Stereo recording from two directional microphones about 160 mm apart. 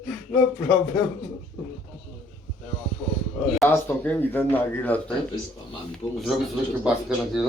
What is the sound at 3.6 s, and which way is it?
Speech, 10° left (ahead or behind).